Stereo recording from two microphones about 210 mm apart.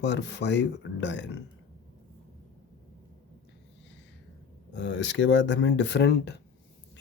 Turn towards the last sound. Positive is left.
turn(degrees=50)  # may be behind; listen again after turning